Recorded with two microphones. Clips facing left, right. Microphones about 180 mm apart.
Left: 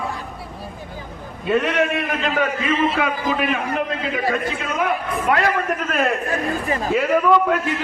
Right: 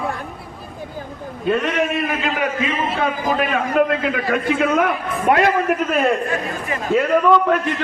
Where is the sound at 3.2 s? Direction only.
50° right (ahead or behind).